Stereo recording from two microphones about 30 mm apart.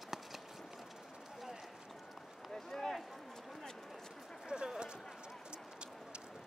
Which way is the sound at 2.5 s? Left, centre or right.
Centre.